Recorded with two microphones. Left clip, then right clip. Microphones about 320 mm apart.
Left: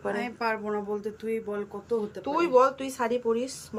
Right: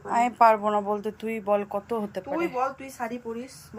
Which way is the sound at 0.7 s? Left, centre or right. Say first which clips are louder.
Right 6 dB; right.